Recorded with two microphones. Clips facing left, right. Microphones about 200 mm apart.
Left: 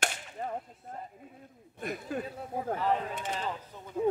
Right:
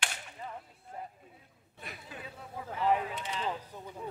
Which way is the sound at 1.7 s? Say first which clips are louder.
Left 12 dB; 50° left (ahead or behind).